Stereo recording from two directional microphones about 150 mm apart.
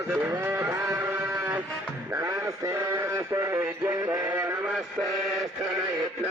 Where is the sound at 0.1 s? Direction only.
15° right (ahead or behind).